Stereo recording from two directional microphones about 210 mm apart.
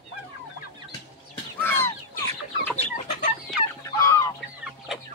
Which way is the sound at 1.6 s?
10° left (ahead or behind).